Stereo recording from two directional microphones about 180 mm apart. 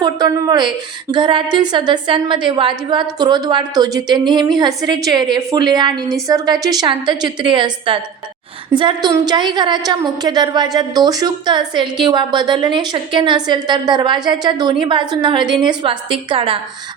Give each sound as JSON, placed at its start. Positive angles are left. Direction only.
{"t": 0.0, "sound": "a woman's voice", "side_deg": -20}